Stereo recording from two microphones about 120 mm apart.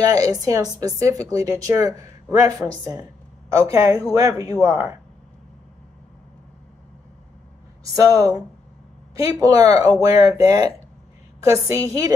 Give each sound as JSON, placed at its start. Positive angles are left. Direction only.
{"t": 0.1, "sound": "speech", "side_deg": -30}
{"t": 7.9, "sound": "speech", "side_deg": -30}